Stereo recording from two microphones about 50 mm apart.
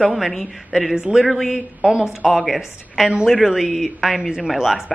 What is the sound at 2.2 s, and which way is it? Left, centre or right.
Speech, centre.